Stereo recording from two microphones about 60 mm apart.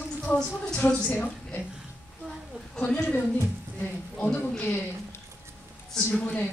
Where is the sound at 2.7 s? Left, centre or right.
Centre.